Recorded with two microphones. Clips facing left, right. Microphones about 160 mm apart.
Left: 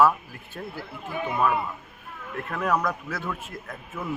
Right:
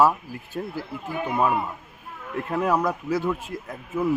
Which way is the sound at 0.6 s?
25° right (ahead or behind).